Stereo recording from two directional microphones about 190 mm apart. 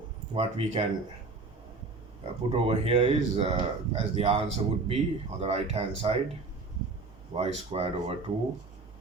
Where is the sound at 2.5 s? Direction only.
30° right (ahead or behind).